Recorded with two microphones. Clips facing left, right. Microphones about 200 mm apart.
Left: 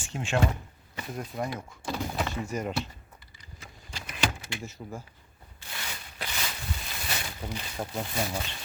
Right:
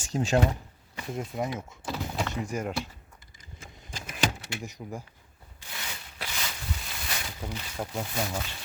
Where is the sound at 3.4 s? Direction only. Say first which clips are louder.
Right 2 dB; 45° right (ahead or behind).